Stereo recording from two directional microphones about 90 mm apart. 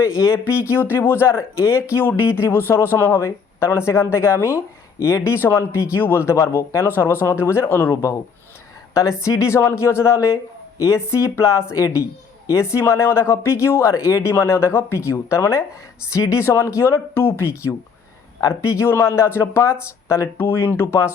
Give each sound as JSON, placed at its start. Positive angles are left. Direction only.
{"t": 0.2, "sound": "speech", "side_deg": 35}
{"t": 9.2, "sound": "speech", "side_deg": 35}